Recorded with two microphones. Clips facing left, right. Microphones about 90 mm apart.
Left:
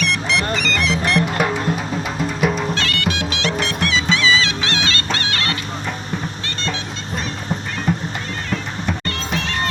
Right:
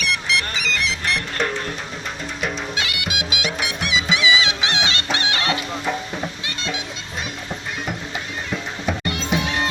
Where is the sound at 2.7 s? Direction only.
10° right (ahead or behind).